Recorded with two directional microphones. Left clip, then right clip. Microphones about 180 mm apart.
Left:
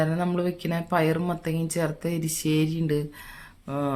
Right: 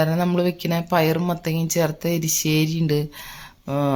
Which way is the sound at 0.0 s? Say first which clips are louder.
Right 5 dB; 30° right (ahead or behind).